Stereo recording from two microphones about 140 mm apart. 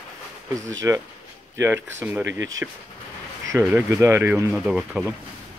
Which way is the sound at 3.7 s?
20° right (ahead or behind).